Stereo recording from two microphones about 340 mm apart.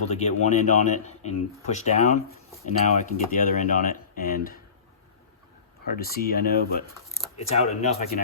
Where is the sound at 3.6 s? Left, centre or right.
Left.